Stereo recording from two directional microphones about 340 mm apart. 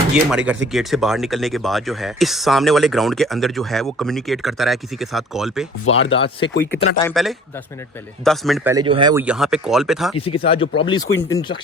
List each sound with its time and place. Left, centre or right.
0.1 s speech: centre
5.8 s speech: left
6.1 s speech: centre
7.0 s speech: centre
10.2 s speech: centre